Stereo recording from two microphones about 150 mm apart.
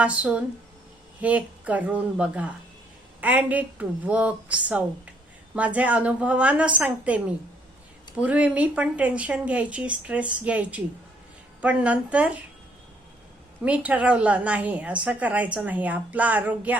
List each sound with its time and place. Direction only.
0.0 s a woman's voice: 10° right (ahead or behind)
13.7 s a woman's voice: 10° right (ahead or behind)